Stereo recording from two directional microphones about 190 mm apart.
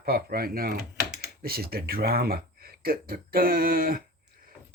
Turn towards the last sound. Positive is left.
turn(degrees=-50)  # may be behind; listen again after turning